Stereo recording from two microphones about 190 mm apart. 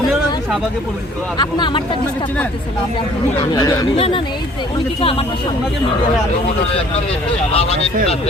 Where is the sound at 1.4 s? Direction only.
25° left (ahead or behind).